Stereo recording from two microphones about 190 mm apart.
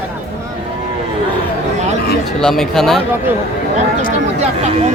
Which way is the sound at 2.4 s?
Centre (ahead or behind).